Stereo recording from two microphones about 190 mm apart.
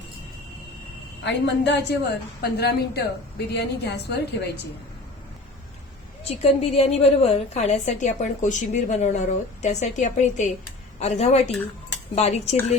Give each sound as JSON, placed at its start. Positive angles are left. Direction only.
{"t": 1.2, "sound": "a woman's voice", "side_deg": 65}
{"t": 6.2, "sound": "a woman's voice", "side_deg": 30}